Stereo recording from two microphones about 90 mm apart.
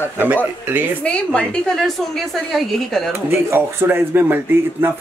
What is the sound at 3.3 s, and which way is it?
Speech, 25° right (ahead or behind).